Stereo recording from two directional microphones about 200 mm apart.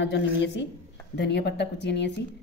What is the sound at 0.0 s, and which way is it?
Speech, 60° left (ahead or behind).